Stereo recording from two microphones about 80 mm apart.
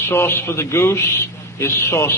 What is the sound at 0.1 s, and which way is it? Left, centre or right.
A man's voice, left.